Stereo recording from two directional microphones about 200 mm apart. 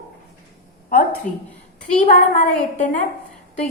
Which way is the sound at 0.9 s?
40° left (ahead or behind).